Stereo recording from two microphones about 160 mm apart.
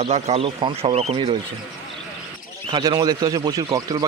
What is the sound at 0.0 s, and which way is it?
Speech, 40° right (ahead or behind).